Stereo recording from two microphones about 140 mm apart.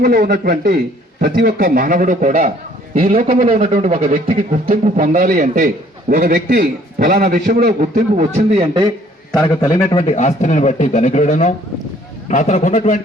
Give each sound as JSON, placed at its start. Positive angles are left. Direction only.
{"t": 0.0, "sound": "a man's voice", "side_deg": -80}
{"t": 3.7, "sound": "speech", "side_deg": -60}
{"t": 4.8, "sound": "a man's voice", "side_deg": -75}
{"t": 9.3, "sound": "a man's voice", "side_deg": 20}
{"t": 10.0, "sound": "a man's voice", "side_deg": 55}